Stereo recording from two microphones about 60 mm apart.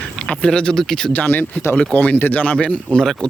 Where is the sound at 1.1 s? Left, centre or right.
Left.